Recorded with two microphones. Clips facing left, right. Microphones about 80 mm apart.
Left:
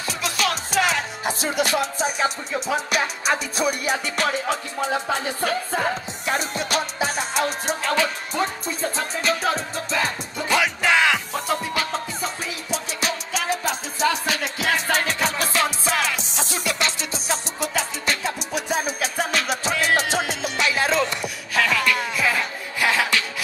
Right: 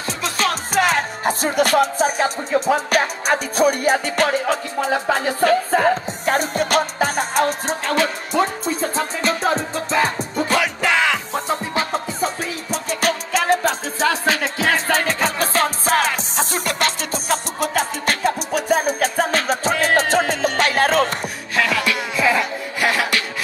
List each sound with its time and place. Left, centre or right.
0.2 s music: right
8.9 s music: right
11.3 s music: right
22.8 s music: right